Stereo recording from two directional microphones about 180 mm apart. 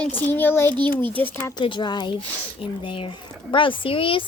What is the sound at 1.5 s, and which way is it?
Speech, 25° left (ahead or behind).